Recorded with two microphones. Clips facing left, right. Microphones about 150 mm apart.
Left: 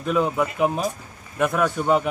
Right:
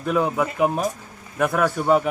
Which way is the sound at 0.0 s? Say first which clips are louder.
Even; 15° right (ahead or behind).